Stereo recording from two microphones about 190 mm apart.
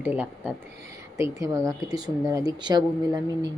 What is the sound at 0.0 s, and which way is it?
Speech, 10° right (ahead or behind).